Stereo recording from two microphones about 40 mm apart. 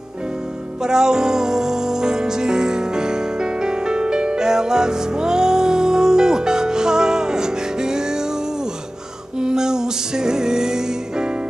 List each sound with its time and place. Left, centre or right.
0.8 s music: centre
9.4 s music: centre